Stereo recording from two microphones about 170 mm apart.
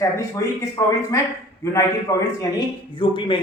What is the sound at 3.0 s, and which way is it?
Speech, 30° left (ahead or behind).